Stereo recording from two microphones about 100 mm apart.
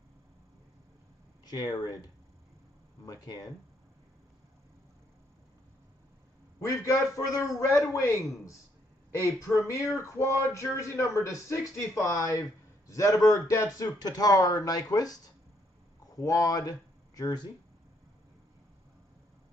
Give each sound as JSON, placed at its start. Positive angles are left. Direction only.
{"t": 1.4, "sound": "speech", "side_deg": 40}
{"t": 3.1, "sound": "a man's voice", "side_deg": 40}
{"t": 6.6, "sound": "a man's voice", "side_deg": 30}